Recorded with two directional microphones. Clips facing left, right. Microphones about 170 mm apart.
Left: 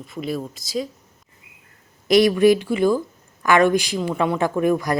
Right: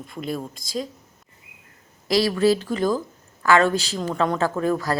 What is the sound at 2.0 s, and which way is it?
A woman's voice, 20° left (ahead or behind).